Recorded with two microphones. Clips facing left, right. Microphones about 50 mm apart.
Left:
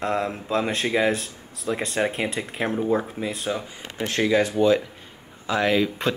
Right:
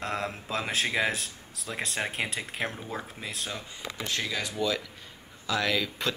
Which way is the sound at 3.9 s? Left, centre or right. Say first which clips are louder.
Left 7 dB; left.